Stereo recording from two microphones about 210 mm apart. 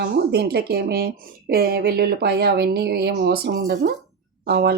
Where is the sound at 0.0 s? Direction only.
50° right (ahead or behind).